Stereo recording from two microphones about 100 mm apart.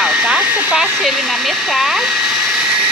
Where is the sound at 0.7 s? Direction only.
5° right (ahead or behind).